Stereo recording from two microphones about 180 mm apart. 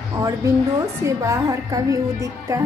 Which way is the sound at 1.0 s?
15° right (ahead or behind).